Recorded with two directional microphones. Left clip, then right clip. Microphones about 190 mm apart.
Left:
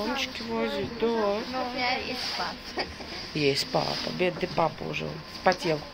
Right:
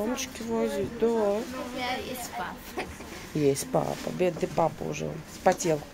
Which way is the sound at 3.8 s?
15° right (ahead or behind).